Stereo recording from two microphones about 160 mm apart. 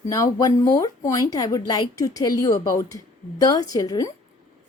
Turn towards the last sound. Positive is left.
turn(degrees=20)  # may be behind; listen again after turning